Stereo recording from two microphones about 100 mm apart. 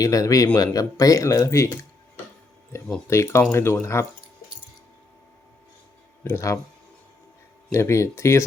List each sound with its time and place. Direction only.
0.0 s speech: 35° left (ahead or behind)
3.1 s speech: 25° left (ahead or behind)
6.2 s speech: 25° left (ahead or behind)
7.7 s speech: 30° left (ahead or behind)